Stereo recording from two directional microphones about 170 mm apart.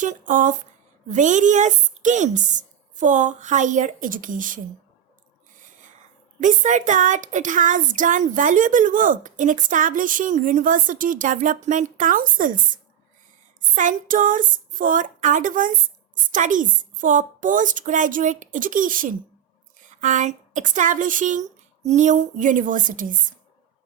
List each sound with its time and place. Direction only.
0.0 s speech: 50° right (ahead or behind)
5.5 s a sound: 50° right (ahead or behind)
6.4 s a woman's voice: 45° right (ahead or behind)